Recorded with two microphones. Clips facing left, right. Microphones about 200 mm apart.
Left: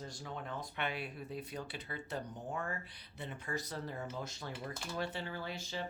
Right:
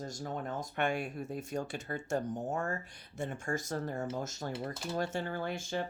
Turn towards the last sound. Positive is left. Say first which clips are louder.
# right 6 dB
turn(degrees=-50)  # may be behind; listen again after turning